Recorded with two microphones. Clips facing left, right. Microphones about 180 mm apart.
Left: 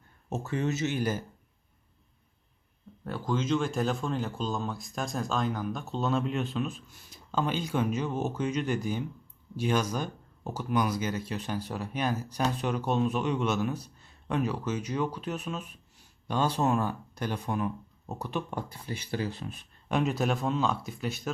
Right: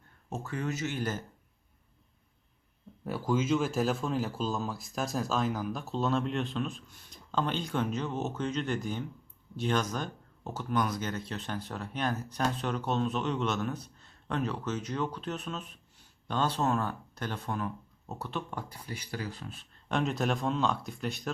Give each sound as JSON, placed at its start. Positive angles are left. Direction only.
{"t": 0.3, "sound": "speech", "side_deg": 20}
{"t": 3.1, "sound": "a man's voice", "side_deg": -5}
{"t": 18.7, "sound": "speech", "side_deg": 25}
{"t": 19.9, "sound": "speech", "side_deg": 5}